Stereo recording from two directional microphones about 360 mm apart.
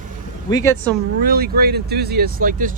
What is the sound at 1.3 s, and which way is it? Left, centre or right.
Speech, right.